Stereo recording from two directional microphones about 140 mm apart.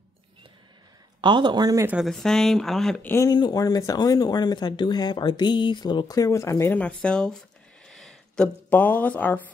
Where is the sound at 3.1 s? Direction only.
20° left (ahead or behind).